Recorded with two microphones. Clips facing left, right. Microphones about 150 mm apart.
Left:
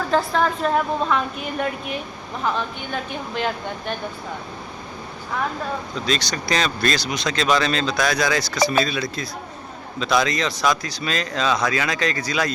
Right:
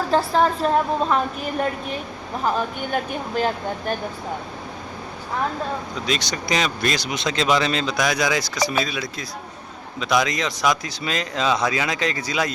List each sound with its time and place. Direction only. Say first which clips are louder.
0.1 s a woman's voice: right 2 dB; 30° right (ahead or behind)
6.1 s speech: left 1 dB; 20° right (ahead or behind)